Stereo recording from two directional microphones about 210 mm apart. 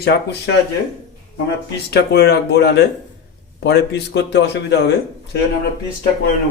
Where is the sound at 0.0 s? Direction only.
55° left (ahead or behind).